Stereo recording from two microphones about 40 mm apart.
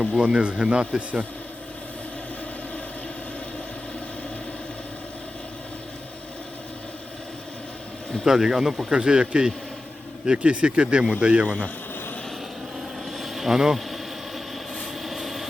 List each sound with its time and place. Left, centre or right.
0.2 s speech: right
8.2 s speech: centre
8.9 s speech: right
11.4 s speech: left
13.1 s vehicle: centre
15.0 s vehicle: centre